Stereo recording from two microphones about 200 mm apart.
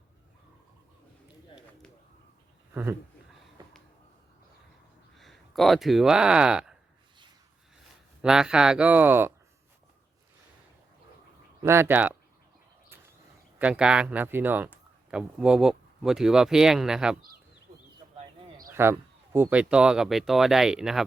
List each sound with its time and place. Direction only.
3.6 s a sound: 20° right (ahead or behind)
5.1 s speech: centre (ahead or behind)
8.2 s speech: 5° right (ahead or behind)
11.6 s speech: 10° right (ahead or behind)
13.6 s speech: 5° right (ahead or behind)
18.7 s speech: 10° right (ahead or behind)